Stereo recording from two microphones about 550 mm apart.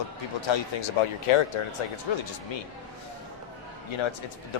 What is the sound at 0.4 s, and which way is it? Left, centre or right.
Speech, left.